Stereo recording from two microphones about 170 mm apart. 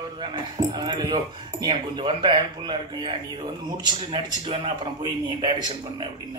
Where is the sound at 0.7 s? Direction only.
25° right (ahead or behind).